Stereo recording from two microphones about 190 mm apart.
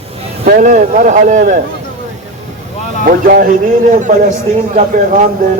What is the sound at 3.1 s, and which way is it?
A man's voice, 50° right (ahead or behind).